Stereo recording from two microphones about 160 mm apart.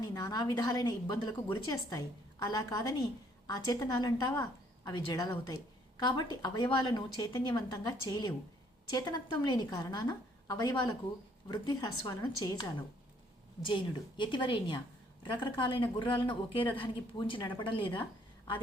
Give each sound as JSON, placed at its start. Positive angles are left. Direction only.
{"t": 0.0, "sound": "a woman's voice", "side_deg": 25}